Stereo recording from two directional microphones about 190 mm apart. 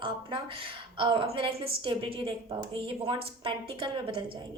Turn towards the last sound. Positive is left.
turn(degrees=-25)  # may be behind; listen again after turning